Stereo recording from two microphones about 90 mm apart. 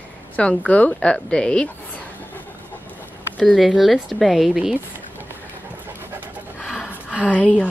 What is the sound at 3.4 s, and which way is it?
A woman's voice, centre (ahead or behind).